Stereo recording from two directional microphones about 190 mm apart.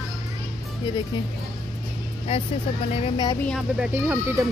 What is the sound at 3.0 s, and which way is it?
Speech, 20° left (ahead or behind).